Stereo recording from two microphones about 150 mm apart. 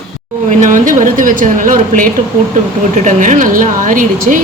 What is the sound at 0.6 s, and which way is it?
A woman's voice, 60° right (ahead or behind).